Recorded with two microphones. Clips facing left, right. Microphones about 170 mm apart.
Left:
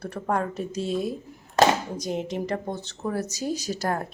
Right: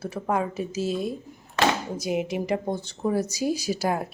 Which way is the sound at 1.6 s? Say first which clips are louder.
Left 4 dB; 40° left (ahead or behind).